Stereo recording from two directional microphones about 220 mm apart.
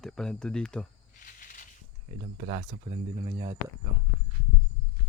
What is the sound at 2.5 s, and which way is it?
Speech, 30° right (ahead or behind).